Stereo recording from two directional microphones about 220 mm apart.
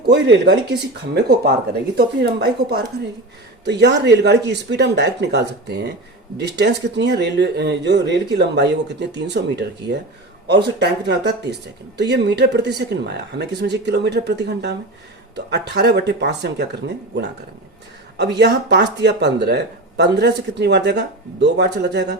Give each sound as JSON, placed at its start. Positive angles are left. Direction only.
{"t": 0.1, "sound": "speech", "side_deg": -50}
{"t": 18.2, "sound": "speech", "side_deg": -50}